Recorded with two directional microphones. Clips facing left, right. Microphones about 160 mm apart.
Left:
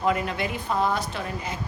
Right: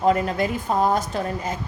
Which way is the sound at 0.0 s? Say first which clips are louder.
Right 5 dB; 40° right (ahead or behind).